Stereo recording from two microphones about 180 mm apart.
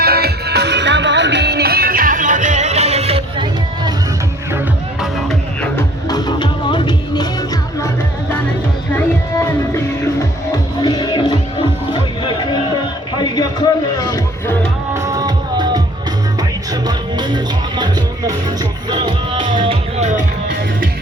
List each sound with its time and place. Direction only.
0.0 s music: 60° right (ahead or behind); by 3.9 s 25° right (ahead or behind)
4.9 s music: centre (ahead or behind)
6.1 s music: 20° left (ahead or behind)
10.8 s music: 25° left (ahead or behind)
14.9 s music: 20° right (ahead or behind)
20.0 s music: 40° right (ahead or behind)